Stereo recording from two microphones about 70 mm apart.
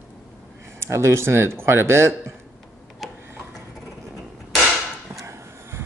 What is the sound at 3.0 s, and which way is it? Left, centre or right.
Tick-tock, centre.